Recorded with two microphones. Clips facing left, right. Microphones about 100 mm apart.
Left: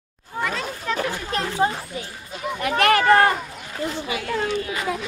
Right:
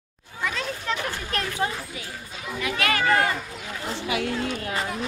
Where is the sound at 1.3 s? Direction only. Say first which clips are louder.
Left 5 dB; 30° left (ahead or behind).